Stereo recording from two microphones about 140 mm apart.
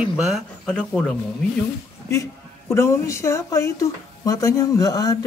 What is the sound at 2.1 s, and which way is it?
Speech, 20° left (ahead or behind).